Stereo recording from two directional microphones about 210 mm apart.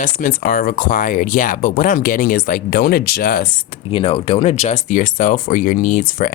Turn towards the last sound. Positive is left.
turn(degrees=35)  # may be behind; listen again after turning